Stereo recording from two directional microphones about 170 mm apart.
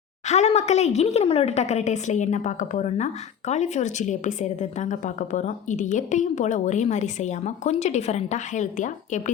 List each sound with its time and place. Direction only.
0.3 s a woman's voice: 40° left (ahead or behind)